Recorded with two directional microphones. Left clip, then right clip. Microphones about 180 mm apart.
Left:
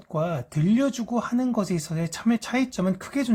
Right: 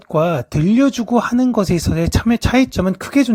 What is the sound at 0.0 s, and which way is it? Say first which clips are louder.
Speech: right 11 dB; 45° right (ahead or behind).